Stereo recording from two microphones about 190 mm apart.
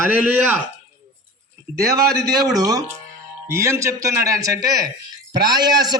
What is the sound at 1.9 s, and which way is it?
A man's voice, 20° right (ahead or behind).